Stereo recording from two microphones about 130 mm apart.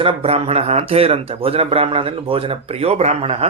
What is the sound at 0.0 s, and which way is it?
Speech, 50° right (ahead or behind).